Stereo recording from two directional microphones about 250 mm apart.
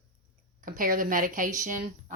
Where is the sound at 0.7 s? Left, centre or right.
Right.